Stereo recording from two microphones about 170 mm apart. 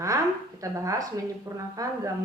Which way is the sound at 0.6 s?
20° right (ahead or behind).